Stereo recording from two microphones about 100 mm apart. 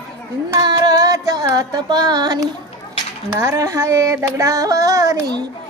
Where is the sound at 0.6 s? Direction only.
40° right (ahead or behind).